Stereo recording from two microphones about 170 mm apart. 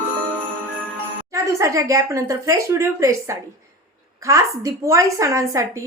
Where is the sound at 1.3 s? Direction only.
20° right (ahead or behind).